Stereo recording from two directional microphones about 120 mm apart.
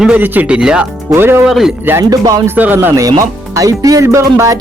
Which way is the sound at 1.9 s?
25° right (ahead or behind).